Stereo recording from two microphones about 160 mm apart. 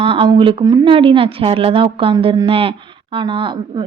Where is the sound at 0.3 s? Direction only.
30° right (ahead or behind).